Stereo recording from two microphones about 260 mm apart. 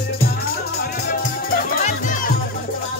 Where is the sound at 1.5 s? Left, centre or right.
Left.